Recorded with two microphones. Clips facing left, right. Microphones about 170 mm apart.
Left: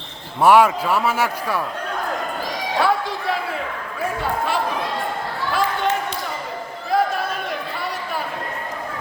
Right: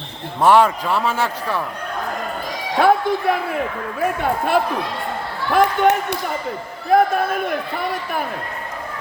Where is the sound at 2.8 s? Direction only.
50° right (ahead or behind).